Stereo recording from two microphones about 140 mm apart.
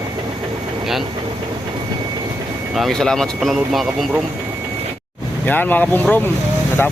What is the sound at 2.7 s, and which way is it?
Speech, centre (ahead or behind).